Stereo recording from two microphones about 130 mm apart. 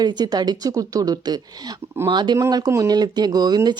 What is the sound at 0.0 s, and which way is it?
Speech, 35° right (ahead or behind).